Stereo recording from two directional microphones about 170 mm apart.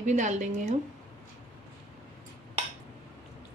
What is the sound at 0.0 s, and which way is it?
Speech, 45° right (ahead or behind).